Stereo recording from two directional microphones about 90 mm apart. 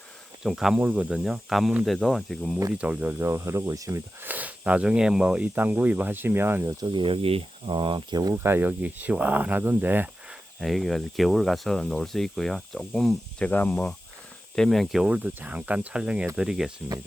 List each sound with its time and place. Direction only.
0.4 s speech: 5° right (ahead or behind)
0.8 s speech: 20° right (ahead or behind); by 2.6 s centre (ahead or behind)
2.7 s speech: 15° right (ahead or behind); by 4.0 s 35° right (ahead or behind)
4.2 s speech: 20° right (ahead or behind)
6.8 s speech: 65° right (ahead or behind)
8.4 s speech: 25° right (ahead or behind)
10.2 s speech: centre (ahead or behind)
13.4 s speech: 20° left (ahead or behind)
14.5 s speech: 5° left (ahead or behind)
15.0 s speech: 15° right (ahead or behind)